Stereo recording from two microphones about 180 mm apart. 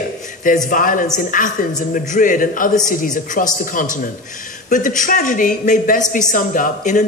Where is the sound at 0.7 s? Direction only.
50° left (ahead or behind).